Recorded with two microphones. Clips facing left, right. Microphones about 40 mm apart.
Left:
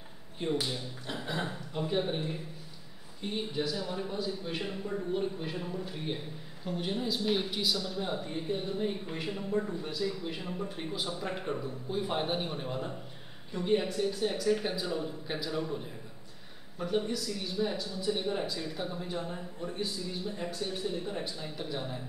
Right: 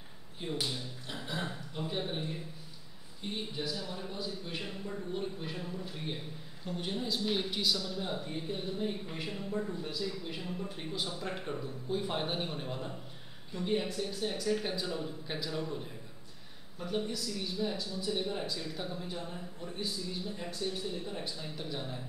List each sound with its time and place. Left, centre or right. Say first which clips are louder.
0.4 s a man's voice: left 4 dB; centre
21.2 s a man's voice: left 2 dB; centre